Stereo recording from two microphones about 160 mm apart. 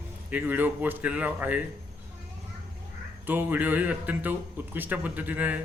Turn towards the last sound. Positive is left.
turn(degrees=-10)  # may be behind; listen again after turning